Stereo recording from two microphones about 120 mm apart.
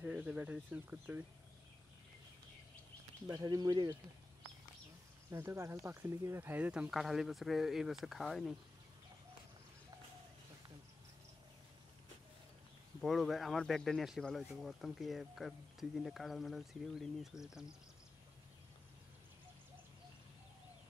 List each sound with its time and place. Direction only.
0.0 s speech: 15° right (ahead or behind)
3.3 s speech: 30° right (ahead or behind)
5.3 s speech: 20° right (ahead or behind); by 8.5 s centre (ahead or behind)
13.0 s speech: centre (ahead or behind)